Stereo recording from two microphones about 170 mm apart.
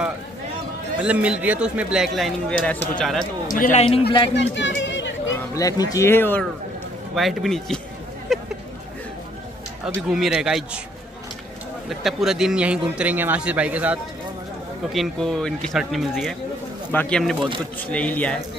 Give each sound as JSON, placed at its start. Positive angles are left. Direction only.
{"t": 1.0, "sound": "speech", "side_deg": -5}
{"t": 3.5, "sound": "a man's voice", "side_deg": 55}
{"t": 4.3, "sound": "a sound", "side_deg": 90}
{"t": 5.5, "sound": "speech", "side_deg": 20}
{"t": 7.2, "sound": "speech", "side_deg": 0}
{"t": 8.3, "sound": "a sound", "side_deg": 0}
{"t": 10.0, "sound": "speech", "side_deg": -5}
{"t": 11.9, "sound": "a man's voice", "side_deg": 0}